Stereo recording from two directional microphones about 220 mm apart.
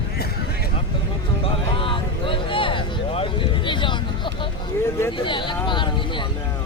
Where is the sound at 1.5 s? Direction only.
25° left (ahead or behind).